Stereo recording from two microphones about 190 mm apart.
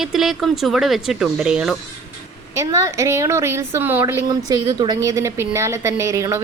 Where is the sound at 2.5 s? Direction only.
15° right (ahead or behind).